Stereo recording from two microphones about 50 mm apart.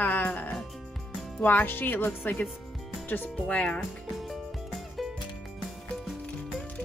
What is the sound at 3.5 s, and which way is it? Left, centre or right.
Speech, left.